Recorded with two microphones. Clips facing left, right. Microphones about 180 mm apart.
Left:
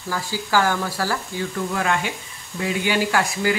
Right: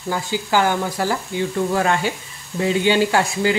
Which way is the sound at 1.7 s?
30° right (ahead or behind).